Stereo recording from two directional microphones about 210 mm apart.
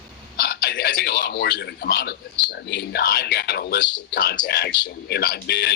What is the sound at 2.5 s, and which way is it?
Speech, 50° left (ahead or behind).